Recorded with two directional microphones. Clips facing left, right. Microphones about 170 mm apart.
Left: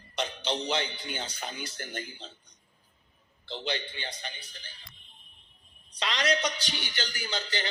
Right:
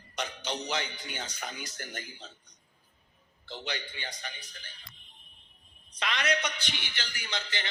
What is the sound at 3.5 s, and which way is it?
A man's voice, 30° left (ahead or behind).